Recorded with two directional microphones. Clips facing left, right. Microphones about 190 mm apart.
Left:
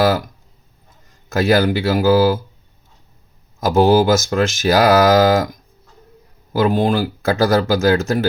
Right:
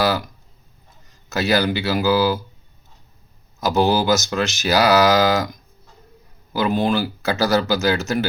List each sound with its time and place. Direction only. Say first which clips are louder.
1.3 s speech: left 4 dB; 50° left (ahead or behind)
3.6 s speech: left 5 dB; 50° left (ahead or behind)
6.5 s speech: left 3 dB; 50° left (ahead or behind)